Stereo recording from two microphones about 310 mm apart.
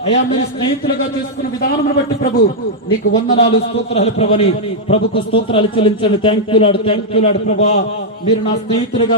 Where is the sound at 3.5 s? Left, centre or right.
Centre.